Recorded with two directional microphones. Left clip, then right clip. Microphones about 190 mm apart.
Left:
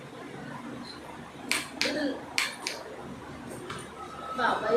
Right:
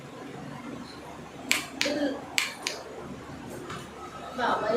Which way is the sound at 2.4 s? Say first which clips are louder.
Right 1 dB; 40° right (ahead or behind).